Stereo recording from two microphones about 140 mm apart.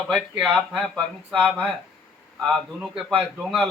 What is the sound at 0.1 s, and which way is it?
Speech, 5° right (ahead or behind).